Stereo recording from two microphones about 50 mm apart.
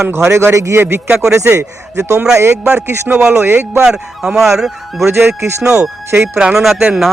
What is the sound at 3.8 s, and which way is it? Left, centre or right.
Speech, centre.